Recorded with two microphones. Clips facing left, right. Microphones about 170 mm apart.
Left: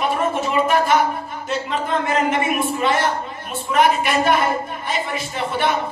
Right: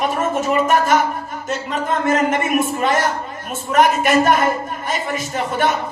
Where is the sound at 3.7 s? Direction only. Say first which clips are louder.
Right 3 dB; 45° right (ahead or behind).